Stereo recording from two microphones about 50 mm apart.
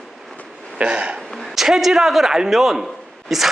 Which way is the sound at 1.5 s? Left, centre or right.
Centre.